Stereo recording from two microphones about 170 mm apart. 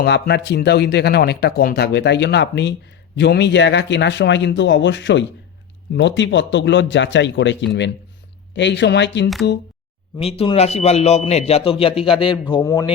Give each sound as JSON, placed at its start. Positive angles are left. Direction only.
{"t": 0.0, "sound": "speech", "side_deg": 80}
{"t": 10.2, "sound": "a man's voice", "side_deg": 35}